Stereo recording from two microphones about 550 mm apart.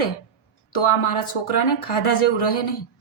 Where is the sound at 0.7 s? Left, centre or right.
Left.